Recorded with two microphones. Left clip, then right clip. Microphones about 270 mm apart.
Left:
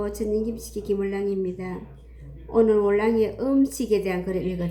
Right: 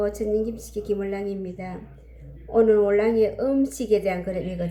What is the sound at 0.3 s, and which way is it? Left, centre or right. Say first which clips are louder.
Speech: right 1 dB; right.